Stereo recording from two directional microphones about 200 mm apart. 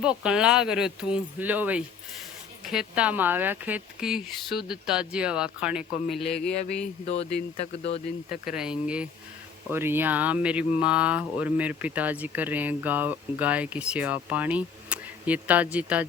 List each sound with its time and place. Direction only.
0.0 s speech: 5° right (ahead or behind)
7.0 s speech: 30° left (ahead or behind)
8.4 s speech: 5° right (ahead or behind)